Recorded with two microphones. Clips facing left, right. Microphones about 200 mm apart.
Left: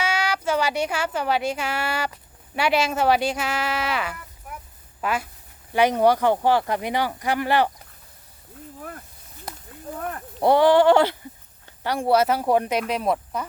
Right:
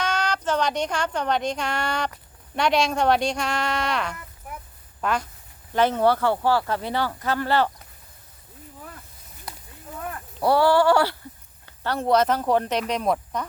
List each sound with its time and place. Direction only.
0.0 s speech: 10° left (ahead or behind)
10.4 s a sound: 20° left (ahead or behind)
11.8 s speech: 10° left (ahead or behind)